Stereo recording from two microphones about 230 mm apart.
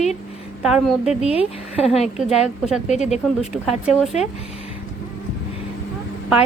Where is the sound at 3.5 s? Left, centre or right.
Centre.